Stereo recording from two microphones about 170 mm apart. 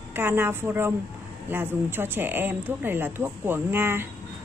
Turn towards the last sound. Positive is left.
turn(degrees=-15)  # may be behind; listen again after turning